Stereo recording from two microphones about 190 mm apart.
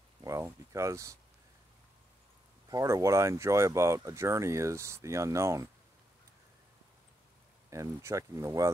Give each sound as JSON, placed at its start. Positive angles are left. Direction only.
{"t": 0.2, "sound": "speech", "side_deg": -15}
{"t": 2.7, "sound": "speech", "side_deg": -15}
{"t": 7.7, "sound": "speech", "side_deg": -15}